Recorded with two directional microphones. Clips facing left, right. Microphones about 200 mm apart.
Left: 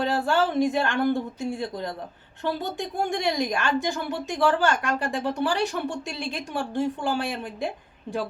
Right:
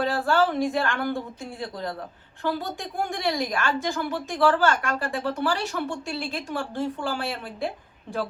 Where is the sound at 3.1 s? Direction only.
20° left (ahead or behind).